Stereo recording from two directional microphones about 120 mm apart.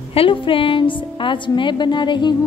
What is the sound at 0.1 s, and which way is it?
A woman's voice, 50° left (ahead or behind).